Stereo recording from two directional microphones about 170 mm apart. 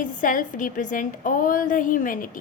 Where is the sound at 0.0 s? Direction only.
50° left (ahead or behind).